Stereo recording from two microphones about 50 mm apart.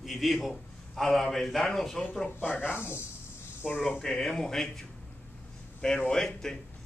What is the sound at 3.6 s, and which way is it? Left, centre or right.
Speech, left.